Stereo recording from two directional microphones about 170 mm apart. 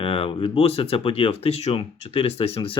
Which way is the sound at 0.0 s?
35° left (ahead or behind).